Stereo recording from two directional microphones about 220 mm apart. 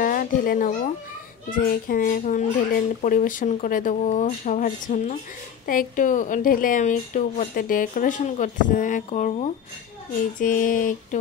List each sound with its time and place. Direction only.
0.0 s a child's voice: 40° left (ahead or behind)